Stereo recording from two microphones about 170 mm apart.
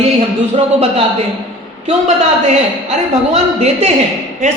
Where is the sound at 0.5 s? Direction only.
35° right (ahead or behind).